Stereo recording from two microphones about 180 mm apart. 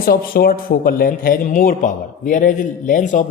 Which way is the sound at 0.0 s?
55° left (ahead or behind).